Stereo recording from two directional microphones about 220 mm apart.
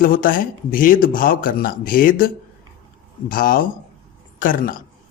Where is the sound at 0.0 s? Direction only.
40° left (ahead or behind).